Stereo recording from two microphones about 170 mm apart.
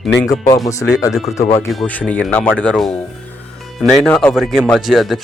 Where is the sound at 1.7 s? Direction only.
5° left (ahead or behind).